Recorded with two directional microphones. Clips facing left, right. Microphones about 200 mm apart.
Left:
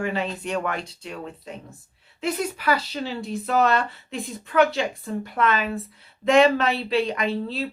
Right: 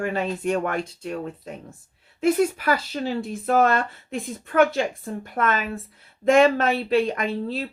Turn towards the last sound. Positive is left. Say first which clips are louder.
# even
turn(degrees=-50)  # may be behind; listen again after turning